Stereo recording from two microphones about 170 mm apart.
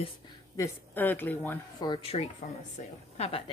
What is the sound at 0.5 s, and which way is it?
Speech, 15° left (ahead or behind).